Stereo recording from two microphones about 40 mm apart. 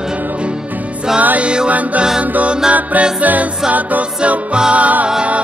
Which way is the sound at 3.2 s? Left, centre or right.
Right.